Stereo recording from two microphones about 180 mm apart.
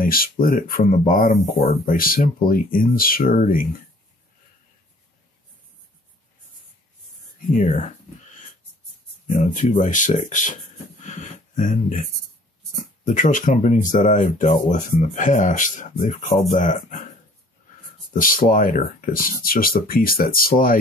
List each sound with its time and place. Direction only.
0.0 s speech: 55° left (ahead or behind)
7.3 s whispering: 45° left (ahead or behind)
9.3 s speech: 45° left (ahead or behind)
13.0 s speech: 45° left (ahead or behind)
18.1 s speech: 50° left (ahead or behind)